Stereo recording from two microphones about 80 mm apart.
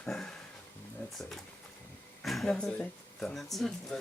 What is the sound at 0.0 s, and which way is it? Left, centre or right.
Speech, centre.